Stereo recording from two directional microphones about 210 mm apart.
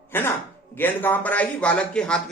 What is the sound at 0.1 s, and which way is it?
A man's voice, 10° left (ahead or behind).